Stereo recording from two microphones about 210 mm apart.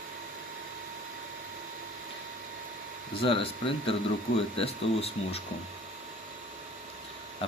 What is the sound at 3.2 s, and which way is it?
Speech, 25° left (ahead or behind).